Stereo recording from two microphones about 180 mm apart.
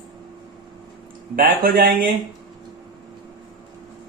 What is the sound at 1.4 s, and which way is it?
Speech, 50° right (ahead or behind).